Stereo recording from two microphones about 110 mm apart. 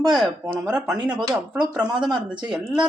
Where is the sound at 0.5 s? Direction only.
5° right (ahead or behind).